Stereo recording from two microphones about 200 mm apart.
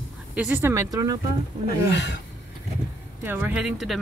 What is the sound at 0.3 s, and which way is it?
Speech, 5° right (ahead or behind).